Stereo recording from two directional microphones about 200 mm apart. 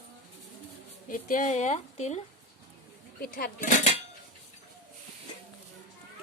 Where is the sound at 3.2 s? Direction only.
50° left (ahead or behind).